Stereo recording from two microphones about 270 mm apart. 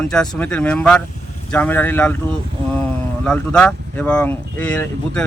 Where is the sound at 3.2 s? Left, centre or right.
Centre.